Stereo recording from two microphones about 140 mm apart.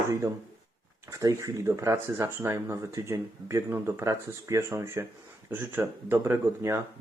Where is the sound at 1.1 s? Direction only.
25° right (ahead or behind).